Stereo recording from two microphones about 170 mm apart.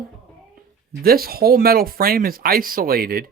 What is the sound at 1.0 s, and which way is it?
Speech, 60° right (ahead or behind).